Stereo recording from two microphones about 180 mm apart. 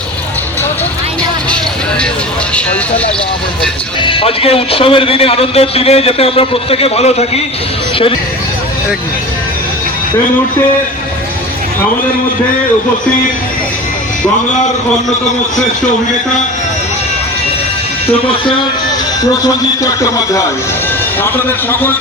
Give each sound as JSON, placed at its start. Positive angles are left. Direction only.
{"t": 4.0, "sound": "a man's voice", "side_deg": 30}
{"t": 19.4, "sound": "a man's voice", "side_deg": 20}